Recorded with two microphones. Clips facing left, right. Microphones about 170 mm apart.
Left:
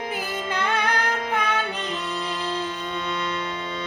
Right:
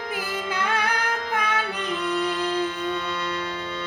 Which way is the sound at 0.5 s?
10° right (ahead or behind).